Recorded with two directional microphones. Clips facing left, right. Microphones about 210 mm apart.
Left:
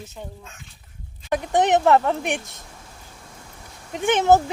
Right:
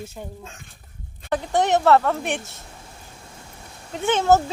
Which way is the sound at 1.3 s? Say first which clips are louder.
Left 1 dB; 15° left (ahead or behind).